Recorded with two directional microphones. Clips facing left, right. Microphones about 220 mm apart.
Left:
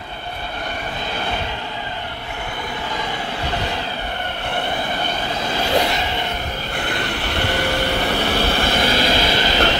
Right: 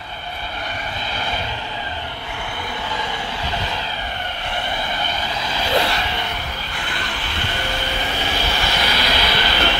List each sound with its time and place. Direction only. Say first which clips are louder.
5.3 s vehicle: left 3 dB; 45° left (ahead or behind)
5.8 s a sound: left 1 dB; 20° left (ahead or behind)
7.0 s vehicle: left 6 dB; 65° left (ahead or behind); by 9.8 s 45° left (ahead or behind)